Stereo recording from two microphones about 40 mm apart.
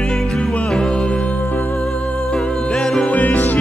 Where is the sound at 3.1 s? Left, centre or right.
Left.